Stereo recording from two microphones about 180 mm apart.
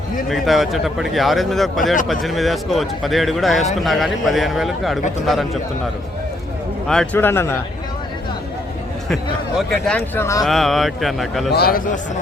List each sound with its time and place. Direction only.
0.3 s a man's voice: centre (ahead or behind)
6.8 s speech: 5° left (ahead or behind)
9.8 s a man's voice: 5° left (ahead or behind)
11.5 s a man's voice: 55° left (ahead or behind)